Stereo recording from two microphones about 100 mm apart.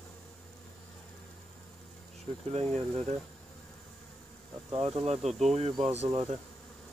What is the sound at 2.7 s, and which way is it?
Speech, 90° right.